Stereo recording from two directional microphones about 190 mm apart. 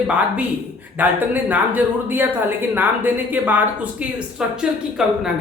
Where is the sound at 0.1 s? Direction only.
5° right (ahead or behind).